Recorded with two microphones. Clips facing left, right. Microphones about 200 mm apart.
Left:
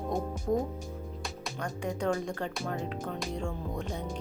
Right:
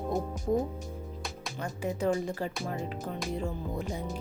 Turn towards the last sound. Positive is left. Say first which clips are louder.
# right 1 dB
turn(degrees=-5)  # may be behind; listen again after turning